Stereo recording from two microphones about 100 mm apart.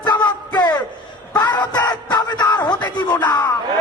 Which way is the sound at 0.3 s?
45° left (ahead or behind).